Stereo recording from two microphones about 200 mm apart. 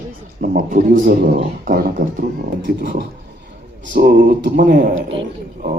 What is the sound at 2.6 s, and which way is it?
Speech, 55° right (ahead or behind).